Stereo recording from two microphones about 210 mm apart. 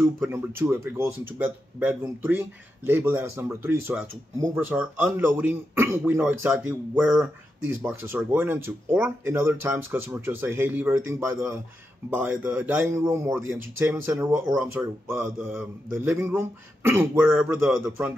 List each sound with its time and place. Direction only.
0.0 s speech: 10° right (ahead or behind)